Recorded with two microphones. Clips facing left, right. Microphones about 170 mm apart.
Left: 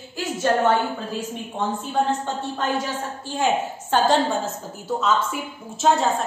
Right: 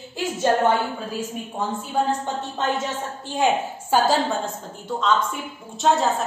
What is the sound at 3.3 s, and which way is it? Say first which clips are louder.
A woman's voice: right 1 dB; 15° right (ahead or behind).